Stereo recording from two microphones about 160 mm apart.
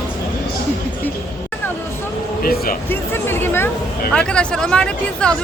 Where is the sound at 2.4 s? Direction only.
65° left (ahead or behind).